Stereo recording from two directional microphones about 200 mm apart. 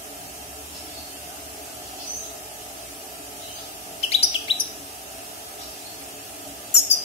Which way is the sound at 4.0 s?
30° left (ahead or behind).